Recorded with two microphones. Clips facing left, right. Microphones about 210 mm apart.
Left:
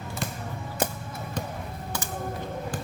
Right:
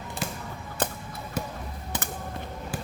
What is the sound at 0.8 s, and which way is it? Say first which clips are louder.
Music: left 1 dB; 10° left (ahead or behind).